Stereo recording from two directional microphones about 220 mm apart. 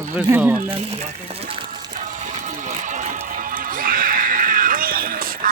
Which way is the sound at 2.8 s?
35° right (ahead or behind).